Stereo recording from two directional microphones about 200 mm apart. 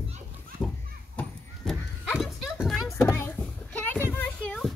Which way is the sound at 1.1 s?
5° left (ahead or behind).